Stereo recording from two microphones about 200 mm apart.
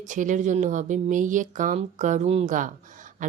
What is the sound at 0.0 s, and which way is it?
Speech, 40° right (ahead or behind).